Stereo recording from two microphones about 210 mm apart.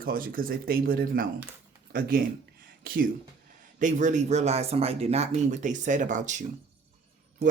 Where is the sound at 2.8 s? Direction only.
45° right (ahead or behind).